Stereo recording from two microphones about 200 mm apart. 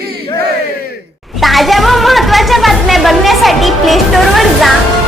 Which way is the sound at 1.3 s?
Centre (ahead or behind).